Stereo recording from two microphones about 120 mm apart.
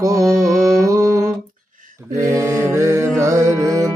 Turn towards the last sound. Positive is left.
turn(degrees=-30)  # may be behind; listen again after turning